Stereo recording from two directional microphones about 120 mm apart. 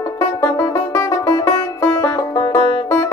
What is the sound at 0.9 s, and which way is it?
Music, 25° left (ahead or behind).